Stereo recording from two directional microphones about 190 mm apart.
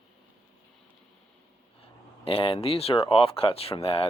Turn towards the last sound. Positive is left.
turn(degrees=30)  # may be behind; listen again after turning